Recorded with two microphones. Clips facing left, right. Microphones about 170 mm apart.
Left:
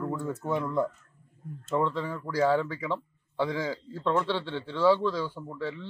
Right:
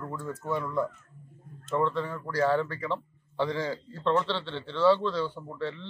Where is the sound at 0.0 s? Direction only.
20° left (ahead or behind).